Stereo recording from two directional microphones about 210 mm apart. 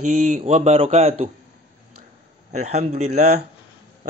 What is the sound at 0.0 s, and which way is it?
Speech, 35° right (ahead or behind).